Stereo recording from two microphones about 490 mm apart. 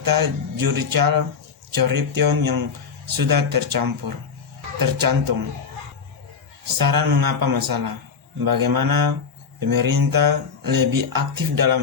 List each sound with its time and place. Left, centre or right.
0.0 s speech: right
6.7 s speech: right